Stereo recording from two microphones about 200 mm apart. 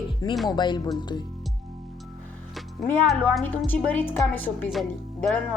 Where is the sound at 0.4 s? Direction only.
20° left (ahead or behind).